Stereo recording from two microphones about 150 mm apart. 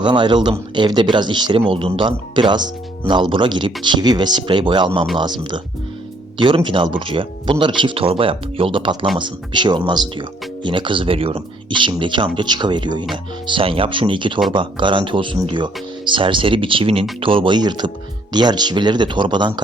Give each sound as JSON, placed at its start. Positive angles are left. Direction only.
{"t": 0.0, "sound": "speech", "side_deg": -30}